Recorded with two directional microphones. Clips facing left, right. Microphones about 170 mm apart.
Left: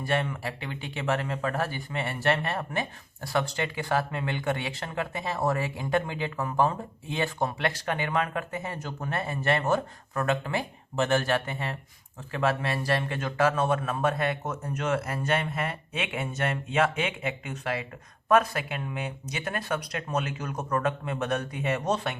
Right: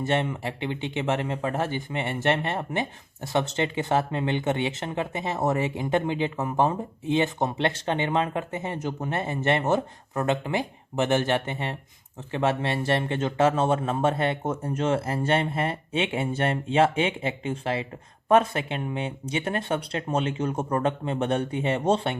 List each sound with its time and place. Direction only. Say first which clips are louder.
0.0 s speech: right 3 dB; 25° right (ahead or behind)